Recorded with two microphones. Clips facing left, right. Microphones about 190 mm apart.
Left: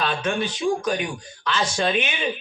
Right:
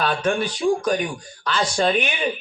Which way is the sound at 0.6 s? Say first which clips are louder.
Right 3 dB; 40° right (ahead or behind).